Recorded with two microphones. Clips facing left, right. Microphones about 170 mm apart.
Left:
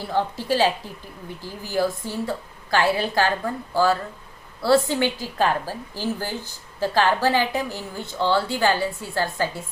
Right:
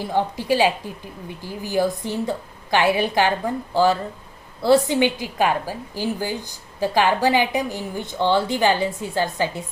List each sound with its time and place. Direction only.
0.0 s a woman's voice: 15° right (ahead or behind)